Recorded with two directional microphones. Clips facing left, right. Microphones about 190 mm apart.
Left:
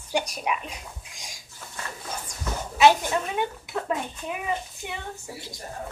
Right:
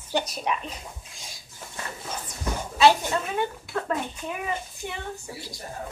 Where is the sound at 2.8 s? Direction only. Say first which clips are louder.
Left 1 dB; 15° left (ahead or behind).